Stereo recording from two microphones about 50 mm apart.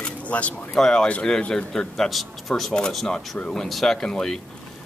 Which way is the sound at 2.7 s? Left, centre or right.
Centre.